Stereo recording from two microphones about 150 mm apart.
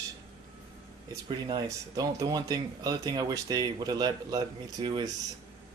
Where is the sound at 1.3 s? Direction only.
30° right (ahead or behind).